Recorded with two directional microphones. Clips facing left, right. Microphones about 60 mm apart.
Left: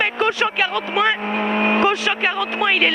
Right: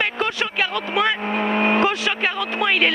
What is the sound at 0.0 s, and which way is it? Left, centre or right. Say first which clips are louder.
Speech: left 4 dB; left.